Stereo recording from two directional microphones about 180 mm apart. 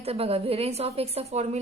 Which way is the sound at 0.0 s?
35° right (ahead or behind).